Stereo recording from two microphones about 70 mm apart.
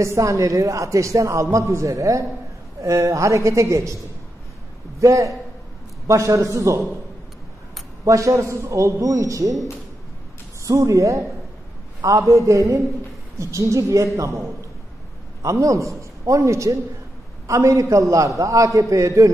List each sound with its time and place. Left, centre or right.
0.0 s a man's voice: right
5.0 s a man's voice: right
8.0 s a man's voice: right
10.7 s a man's voice: right
15.4 s a man's voice: right